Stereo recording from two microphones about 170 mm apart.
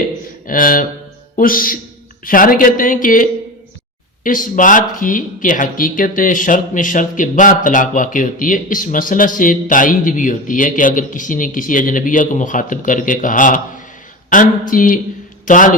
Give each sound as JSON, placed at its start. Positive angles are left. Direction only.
{"t": 0.4, "sound": "a man's voice", "side_deg": 55}